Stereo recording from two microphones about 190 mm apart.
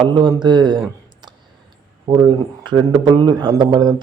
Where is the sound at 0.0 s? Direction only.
25° right (ahead or behind).